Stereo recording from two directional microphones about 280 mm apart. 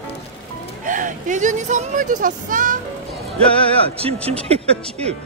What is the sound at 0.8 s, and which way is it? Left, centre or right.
Speech, right.